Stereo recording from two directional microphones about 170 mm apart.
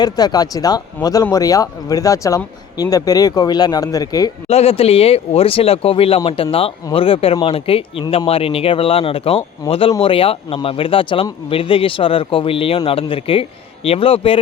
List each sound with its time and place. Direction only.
0.0 s speech: 25° left (ahead or behind)
4.4 s speech: 35° left (ahead or behind)